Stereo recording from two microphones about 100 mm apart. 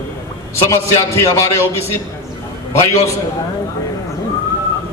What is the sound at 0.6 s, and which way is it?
A man's voice, 30° left (ahead or behind).